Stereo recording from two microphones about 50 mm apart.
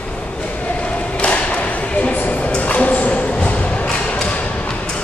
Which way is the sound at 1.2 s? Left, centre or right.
Left.